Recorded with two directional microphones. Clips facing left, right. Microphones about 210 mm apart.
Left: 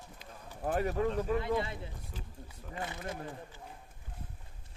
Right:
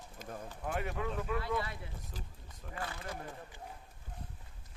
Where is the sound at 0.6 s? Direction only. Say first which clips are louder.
Left 7 dB; 40° left (ahead or behind).